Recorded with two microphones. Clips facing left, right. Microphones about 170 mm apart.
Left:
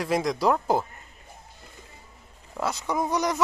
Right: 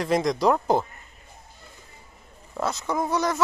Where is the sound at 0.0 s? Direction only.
5° left (ahead or behind).